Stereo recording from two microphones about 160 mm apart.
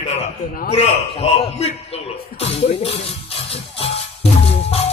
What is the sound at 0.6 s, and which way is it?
A man's voice, 40° left (ahead or behind).